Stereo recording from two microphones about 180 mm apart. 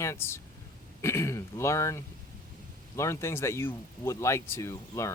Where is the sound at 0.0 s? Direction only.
15° left (ahead or behind).